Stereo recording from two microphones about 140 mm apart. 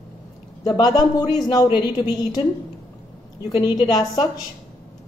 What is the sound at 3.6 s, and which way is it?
Speech, 30° left (ahead or behind).